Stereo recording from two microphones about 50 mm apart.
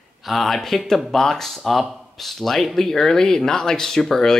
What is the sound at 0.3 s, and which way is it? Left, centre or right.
Speech, centre.